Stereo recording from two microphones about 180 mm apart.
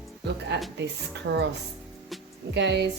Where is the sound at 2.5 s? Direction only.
75° right (ahead or behind).